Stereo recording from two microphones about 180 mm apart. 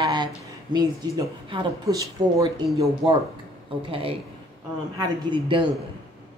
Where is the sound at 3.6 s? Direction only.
30° right (ahead or behind).